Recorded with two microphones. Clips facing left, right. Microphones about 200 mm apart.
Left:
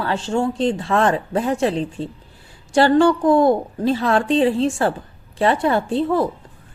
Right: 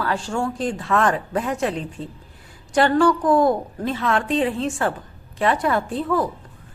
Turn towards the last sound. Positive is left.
turn(degrees=30)  # may be behind; listen again after turning